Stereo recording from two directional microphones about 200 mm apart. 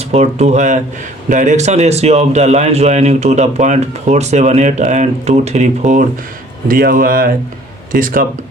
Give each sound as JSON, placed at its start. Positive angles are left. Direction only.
{"t": 0.0, "sound": "a man's voice", "side_deg": -30}